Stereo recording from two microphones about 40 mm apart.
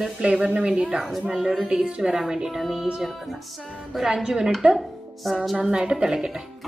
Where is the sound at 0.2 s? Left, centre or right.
Right.